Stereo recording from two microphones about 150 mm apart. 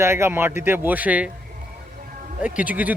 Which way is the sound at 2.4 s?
10° right (ahead or behind).